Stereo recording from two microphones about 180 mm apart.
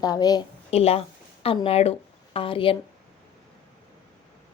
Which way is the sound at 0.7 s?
35° left (ahead or behind).